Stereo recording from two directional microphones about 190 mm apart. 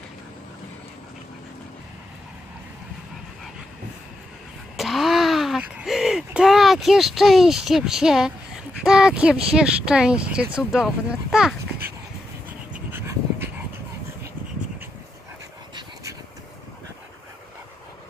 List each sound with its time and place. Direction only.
4.7 s a sound: centre (ahead or behind)
8.8 s speech: 5° right (ahead or behind)
12.7 s dog: 15° right (ahead or behind)
15.7 s dog: 20° right (ahead or behind)